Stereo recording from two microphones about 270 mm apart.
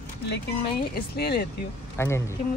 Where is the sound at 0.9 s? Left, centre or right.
Left.